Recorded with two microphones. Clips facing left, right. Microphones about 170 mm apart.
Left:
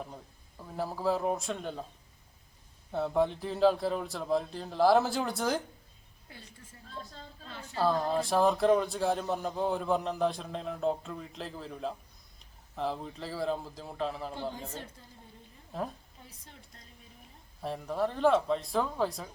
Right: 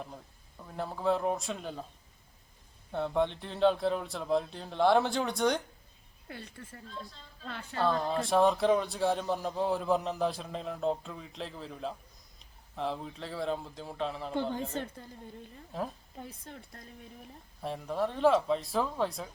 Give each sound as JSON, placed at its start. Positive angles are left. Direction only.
{"t": 0.6, "sound": "a man's voice", "side_deg": 5}
{"t": 2.9, "sound": "a man's voice", "side_deg": 5}
{"t": 6.2, "sound": "speech", "side_deg": -65}
{"t": 7.8, "sound": "a man's voice", "side_deg": 5}
{"t": 14.5, "sound": "speech", "side_deg": -60}
{"t": 15.7, "sound": "a man's voice", "side_deg": 0}
{"t": 16.1, "sound": "speech", "side_deg": -60}
{"t": 17.6, "sound": "a man's voice", "side_deg": 0}